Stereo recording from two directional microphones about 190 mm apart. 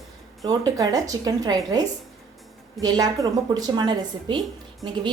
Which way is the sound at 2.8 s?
20° right (ahead or behind).